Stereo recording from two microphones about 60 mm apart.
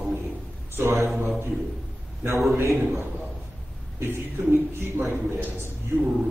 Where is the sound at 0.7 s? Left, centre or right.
Right.